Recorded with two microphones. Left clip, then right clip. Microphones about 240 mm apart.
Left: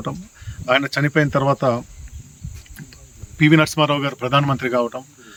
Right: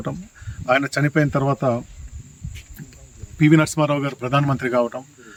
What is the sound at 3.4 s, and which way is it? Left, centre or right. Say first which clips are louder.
Speech: left 2 dB; centre.